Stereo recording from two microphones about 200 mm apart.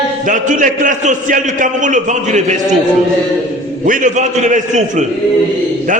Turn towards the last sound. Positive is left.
turn(degrees=-35)  # may be behind; listen again after turning